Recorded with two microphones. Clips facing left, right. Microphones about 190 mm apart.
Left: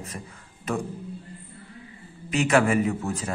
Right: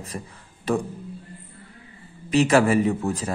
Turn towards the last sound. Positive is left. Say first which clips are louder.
# right 3 dB
turn(degrees=-35)  # may be behind; listen again after turning